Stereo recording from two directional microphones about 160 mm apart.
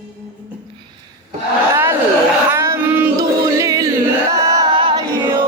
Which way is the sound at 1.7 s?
15° right (ahead or behind).